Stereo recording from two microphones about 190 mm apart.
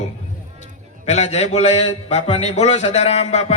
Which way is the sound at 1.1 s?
35° left (ahead or behind).